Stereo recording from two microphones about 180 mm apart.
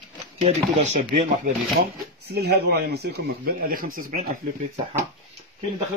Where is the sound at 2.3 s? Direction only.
60° right (ahead or behind).